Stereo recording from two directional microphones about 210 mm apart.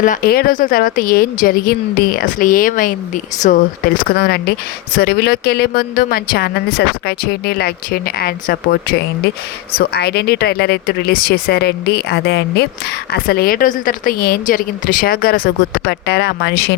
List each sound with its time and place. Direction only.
0.0 s a woman's voice: 40° left (ahead or behind)